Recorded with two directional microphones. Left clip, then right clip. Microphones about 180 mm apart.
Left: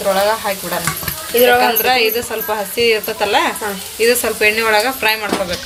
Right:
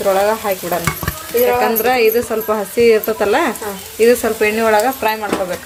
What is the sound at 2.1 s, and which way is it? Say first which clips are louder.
Speech: right 3 dB; 40° right (ahead or behind).